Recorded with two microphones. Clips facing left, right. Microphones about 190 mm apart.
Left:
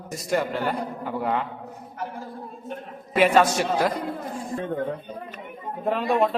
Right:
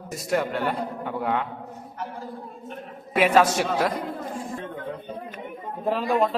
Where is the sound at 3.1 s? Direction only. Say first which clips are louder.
Left 1 dB; centre (ahead or behind).